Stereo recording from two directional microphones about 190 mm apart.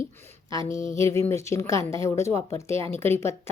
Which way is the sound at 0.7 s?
40° left (ahead or behind).